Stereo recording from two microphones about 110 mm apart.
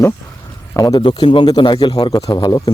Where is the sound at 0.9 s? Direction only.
50° left (ahead or behind).